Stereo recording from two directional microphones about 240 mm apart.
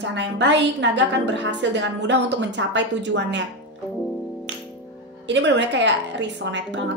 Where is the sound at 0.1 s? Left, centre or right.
Right.